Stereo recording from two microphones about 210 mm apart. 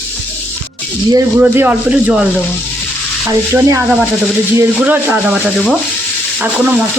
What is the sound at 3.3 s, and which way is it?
Speech, 15° right (ahead or behind).